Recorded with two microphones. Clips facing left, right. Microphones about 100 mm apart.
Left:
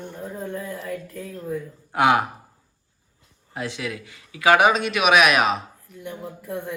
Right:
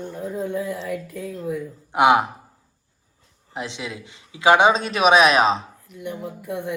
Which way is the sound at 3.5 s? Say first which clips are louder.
Left 1 dB; 20° right (ahead or behind).